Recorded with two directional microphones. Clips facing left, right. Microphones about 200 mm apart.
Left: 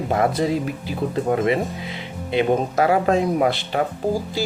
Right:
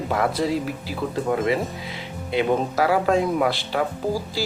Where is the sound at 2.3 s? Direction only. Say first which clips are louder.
Left 2 dB; 25° left (ahead or behind).